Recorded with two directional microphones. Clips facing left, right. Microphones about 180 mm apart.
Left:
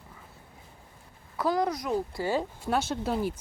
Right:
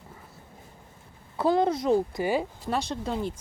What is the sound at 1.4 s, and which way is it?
Speech, 25° right (ahead or behind).